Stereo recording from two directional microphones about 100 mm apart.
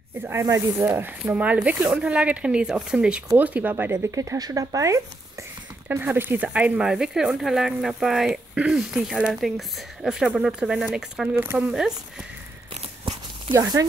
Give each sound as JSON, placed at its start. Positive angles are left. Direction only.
{"t": 0.2, "sound": "speech", "side_deg": -30}
{"t": 4.1, "sound": "speech", "side_deg": -35}
{"t": 5.9, "sound": "speech", "side_deg": -20}
{"t": 13.5, "sound": "speech", "side_deg": -35}